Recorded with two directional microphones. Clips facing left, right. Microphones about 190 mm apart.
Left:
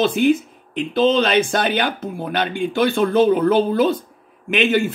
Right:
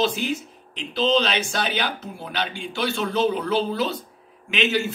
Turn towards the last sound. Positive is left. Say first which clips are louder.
# left 6 dB
turn(degrees=55)  # may be behind; listen again after turning